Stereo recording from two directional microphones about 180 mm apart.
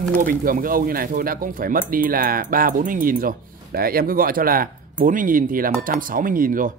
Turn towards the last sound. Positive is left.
turn(degrees=-50)  # may be behind; listen again after turning